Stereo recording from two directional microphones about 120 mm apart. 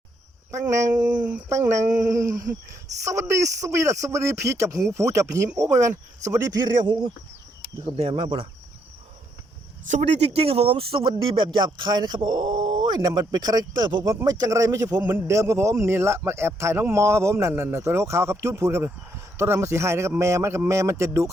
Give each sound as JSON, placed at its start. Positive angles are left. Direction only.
{"t": 0.7, "sound": "a man's voice", "side_deg": -25}
{"t": 1.0, "sound": "speech", "side_deg": -10}
{"t": 1.5, "sound": "a man's voice", "side_deg": -25}
{"t": 6.8, "sound": "speech", "side_deg": -35}
{"t": 7.9, "sound": "speech", "side_deg": -50}
{"t": 9.9, "sound": "a man's voice", "side_deg": -60}